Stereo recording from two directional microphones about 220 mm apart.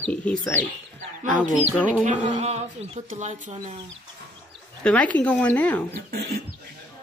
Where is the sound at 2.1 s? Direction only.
30° right (ahead or behind).